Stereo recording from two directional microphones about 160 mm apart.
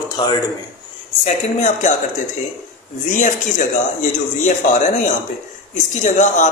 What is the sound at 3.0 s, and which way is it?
Speech, 50° left (ahead or behind).